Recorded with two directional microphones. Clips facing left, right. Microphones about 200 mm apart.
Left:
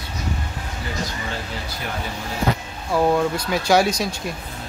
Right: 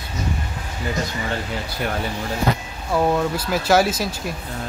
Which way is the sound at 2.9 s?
Centre (ahead or behind).